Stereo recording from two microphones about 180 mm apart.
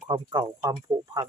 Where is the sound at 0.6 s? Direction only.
20° right (ahead or behind).